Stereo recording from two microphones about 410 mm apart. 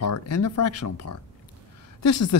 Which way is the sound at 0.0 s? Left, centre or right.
Left.